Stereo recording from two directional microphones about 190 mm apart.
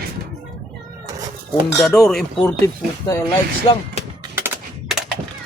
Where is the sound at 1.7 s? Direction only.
Centre (ahead or behind).